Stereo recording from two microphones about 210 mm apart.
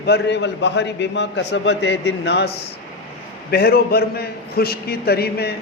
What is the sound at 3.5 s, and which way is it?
A man's voice, 50° left (ahead or behind).